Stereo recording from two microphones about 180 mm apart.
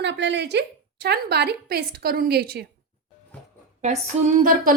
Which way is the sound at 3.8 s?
40° right (ahead or behind).